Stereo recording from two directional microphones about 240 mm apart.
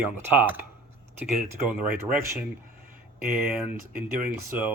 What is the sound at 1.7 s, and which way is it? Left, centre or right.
Speech, centre.